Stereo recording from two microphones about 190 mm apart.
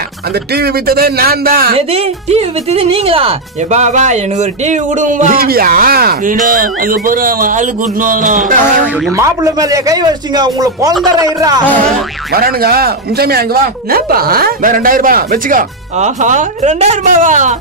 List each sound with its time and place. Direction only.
0.6 s speech: 55° right (ahead or behind)
1.8 s speech: 30° right (ahead or behind)
9.1 s a man's voice: 15° right (ahead or behind)
12.3 s speech: 50° right (ahead or behind)